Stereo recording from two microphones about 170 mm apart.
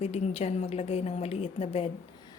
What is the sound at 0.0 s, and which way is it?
A woman's voice, 40° left (ahead or behind).